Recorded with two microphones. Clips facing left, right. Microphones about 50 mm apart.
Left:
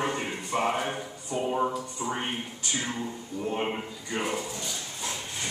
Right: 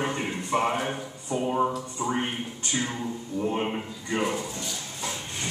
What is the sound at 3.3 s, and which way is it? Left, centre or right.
Speech, right.